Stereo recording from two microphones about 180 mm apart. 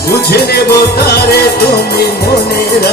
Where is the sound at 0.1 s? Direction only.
60° left (ahead or behind).